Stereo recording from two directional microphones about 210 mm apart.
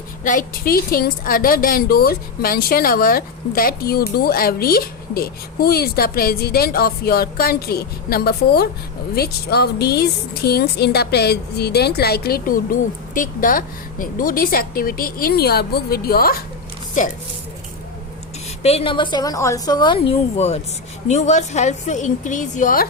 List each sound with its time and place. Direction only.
0.3 s a woman's voice: 40° left (ahead or behind)
18.6 s a woman's voice: 30° left (ahead or behind)